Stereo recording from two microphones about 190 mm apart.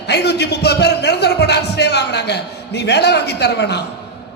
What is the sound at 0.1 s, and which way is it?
A man's voice, 60° left (ahead or behind).